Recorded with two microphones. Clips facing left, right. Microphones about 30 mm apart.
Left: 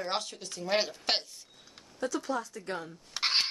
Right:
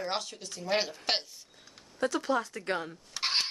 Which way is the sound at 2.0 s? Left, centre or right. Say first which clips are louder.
Right 3 dB; right.